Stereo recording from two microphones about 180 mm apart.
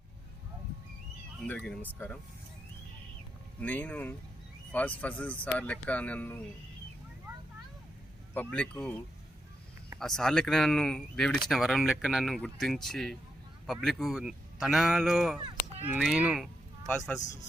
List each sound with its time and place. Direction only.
1.4 s speech: 5° left (ahead or behind)
3.6 s speech: 10° left (ahead or behind)
8.3 s speech: 10° left (ahead or behind)
10.0 s speech: centre (ahead or behind)
15.4 s a sound: 25° right (ahead or behind)
15.9 s speech: 5° right (ahead or behind)